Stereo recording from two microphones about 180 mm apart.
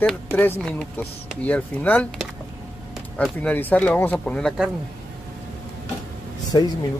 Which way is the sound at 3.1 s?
10° left (ahead or behind).